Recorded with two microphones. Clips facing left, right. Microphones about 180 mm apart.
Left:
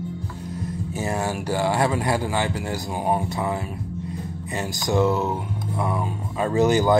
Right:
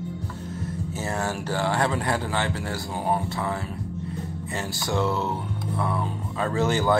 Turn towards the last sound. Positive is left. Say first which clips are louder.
# left 4 dB
turn(degrees=15)  # may be behind; listen again after turning